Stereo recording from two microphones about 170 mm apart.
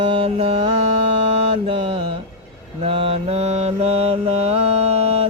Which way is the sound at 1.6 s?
35° right (ahead or behind).